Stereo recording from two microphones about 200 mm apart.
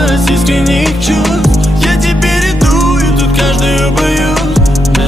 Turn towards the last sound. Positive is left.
turn(degrees=0)  # may be behind; listen again after turning